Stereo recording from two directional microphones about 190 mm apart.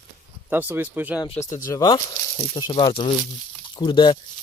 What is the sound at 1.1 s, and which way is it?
Speech, 20° left (ahead or behind).